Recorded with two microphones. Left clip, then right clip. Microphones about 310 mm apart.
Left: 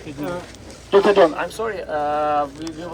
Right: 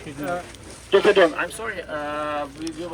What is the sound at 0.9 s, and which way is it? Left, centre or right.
Speech, left.